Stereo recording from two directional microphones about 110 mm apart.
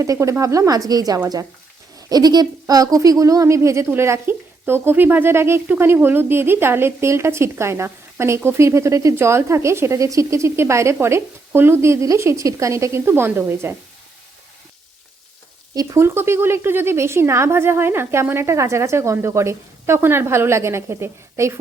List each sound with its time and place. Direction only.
0.0 s speech: 30° right (ahead or behind)
15.7 s speech: 30° right (ahead or behind)